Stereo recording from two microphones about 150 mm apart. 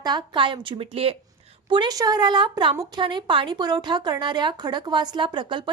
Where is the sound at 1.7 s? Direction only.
30° right (ahead or behind).